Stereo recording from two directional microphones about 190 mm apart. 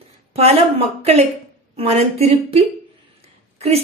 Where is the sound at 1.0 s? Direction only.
35° right (ahead or behind).